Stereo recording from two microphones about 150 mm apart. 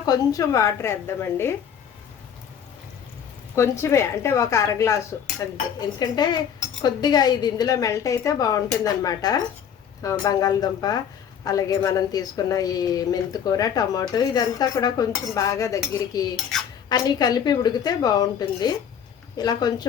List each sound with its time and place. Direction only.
0.0 s a woman's voice: 25° left (ahead or behind)
3.5 s a woman's voice: 15° left (ahead or behind)
6.0 s a woman's voice: 25° left (ahead or behind)
16.3 s cutlery: centre (ahead or behind)
16.9 s a woman's voice: 25° left (ahead or behind)